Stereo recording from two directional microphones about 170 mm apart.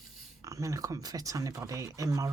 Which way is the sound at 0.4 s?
20° right (ahead or behind).